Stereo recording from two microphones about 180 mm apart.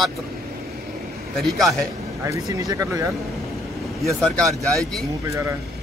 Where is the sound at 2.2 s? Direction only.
20° right (ahead or behind).